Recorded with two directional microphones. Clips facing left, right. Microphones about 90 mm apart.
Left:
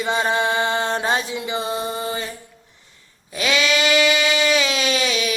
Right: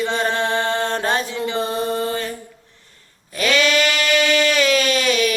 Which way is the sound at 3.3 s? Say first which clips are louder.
Right 2 dB; 50° right (ahead or behind).